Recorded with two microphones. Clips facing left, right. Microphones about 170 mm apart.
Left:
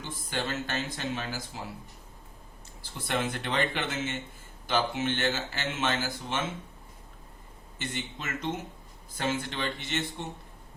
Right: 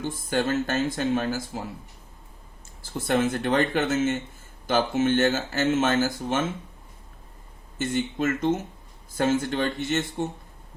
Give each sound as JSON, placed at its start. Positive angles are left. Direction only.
{"t": 0.0, "sound": "speech", "side_deg": -45}
{"t": 2.8, "sound": "speech", "side_deg": -45}
{"t": 7.8, "sound": "speech", "side_deg": -45}